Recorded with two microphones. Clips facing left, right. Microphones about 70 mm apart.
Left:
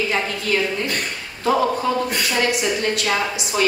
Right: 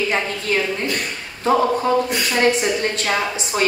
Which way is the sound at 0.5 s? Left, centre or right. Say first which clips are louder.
Right 1 dB; right.